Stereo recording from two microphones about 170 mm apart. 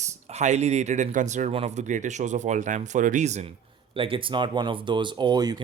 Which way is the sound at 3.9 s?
30° right (ahead or behind).